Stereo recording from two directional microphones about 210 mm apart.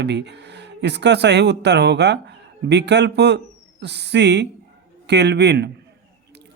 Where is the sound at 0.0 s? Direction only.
55° right (ahead or behind).